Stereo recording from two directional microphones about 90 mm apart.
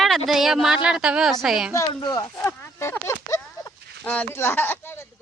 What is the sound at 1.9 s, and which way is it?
Speech, 55° left (ahead or behind).